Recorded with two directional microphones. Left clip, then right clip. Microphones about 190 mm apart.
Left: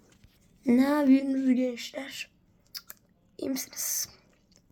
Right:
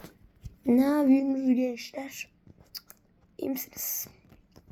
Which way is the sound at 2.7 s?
15° right (ahead or behind).